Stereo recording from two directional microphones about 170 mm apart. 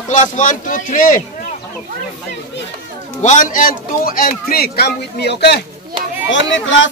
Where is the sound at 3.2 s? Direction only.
45° left (ahead or behind).